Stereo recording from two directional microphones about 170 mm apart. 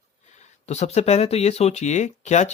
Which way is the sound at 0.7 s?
40° left (ahead or behind).